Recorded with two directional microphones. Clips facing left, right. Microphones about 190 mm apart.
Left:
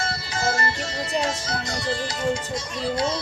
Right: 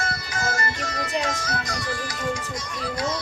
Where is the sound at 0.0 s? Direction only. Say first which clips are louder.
Left 2 dB; 30° left (ahead or behind).